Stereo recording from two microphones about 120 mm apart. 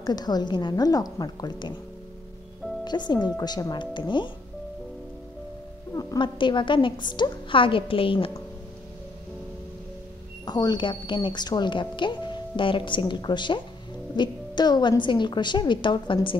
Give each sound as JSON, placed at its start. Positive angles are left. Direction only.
{"t": 0.0, "sound": "a woman's voice", "side_deg": 35}
{"t": 2.8, "sound": "a woman's voice", "side_deg": 35}
{"t": 5.9, "sound": "a woman's voice", "side_deg": 40}
{"t": 10.4, "sound": "a woman's voice", "side_deg": 35}